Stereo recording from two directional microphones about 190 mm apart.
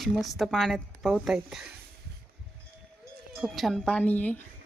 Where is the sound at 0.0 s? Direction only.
Centre (ahead or behind).